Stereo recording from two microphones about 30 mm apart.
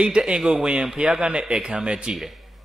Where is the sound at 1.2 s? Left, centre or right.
Right.